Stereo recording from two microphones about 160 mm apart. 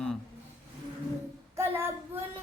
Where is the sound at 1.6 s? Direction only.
15° right (ahead or behind).